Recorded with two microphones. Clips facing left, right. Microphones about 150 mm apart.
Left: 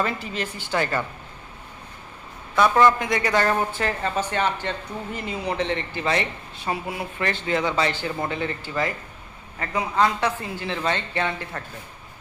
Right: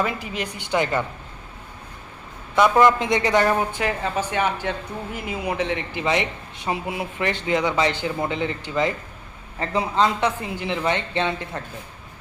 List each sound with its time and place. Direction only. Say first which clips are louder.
0.0 s speech: right 1 dB; 10° right (ahead or behind)
2.6 s a woman's voice: right 2 dB; 15° right (ahead or behind)
3.4 s a woman's voice: right 2 dB; 10° right (ahead or behind)